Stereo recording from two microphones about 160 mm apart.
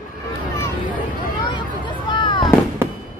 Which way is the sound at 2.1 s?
30° left (ahead or behind).